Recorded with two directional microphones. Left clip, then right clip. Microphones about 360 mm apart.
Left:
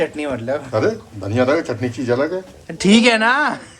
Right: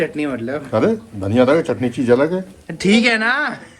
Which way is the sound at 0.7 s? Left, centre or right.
Centre.